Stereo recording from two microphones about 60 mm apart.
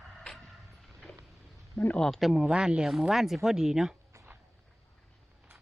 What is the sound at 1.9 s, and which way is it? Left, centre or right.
Speech, centre.